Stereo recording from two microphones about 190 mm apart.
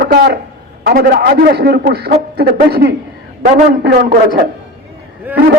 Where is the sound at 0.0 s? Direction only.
55° right (ahead or behind).